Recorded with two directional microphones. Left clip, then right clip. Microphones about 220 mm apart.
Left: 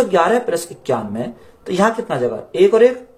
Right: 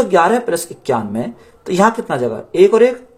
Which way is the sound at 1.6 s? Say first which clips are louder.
Right 3 dB; 45° right (ahead or behind).